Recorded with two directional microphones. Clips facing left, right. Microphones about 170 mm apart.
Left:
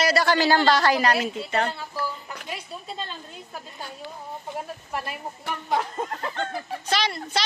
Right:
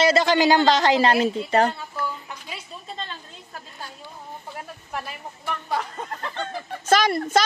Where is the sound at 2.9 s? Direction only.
5° left (ahead or behind).